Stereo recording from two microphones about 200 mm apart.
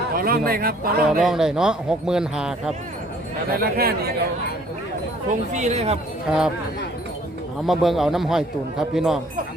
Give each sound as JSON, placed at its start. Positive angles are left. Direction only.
{"t": 0.1, "sound": "speech", "side_deg": -50}
{"t": 1.2, "sound": "speech", "side_deg": 0}
{"t": 3.5, "sound": "speech", "side_deg": -50}
{"t": 5.5, "sound": "speech", "side_deg": -35}
{"t": 6.2, "sound": "speech", "side_deg": -5}
{"t": 7.7, "sound": "speech", "side_deg": 0}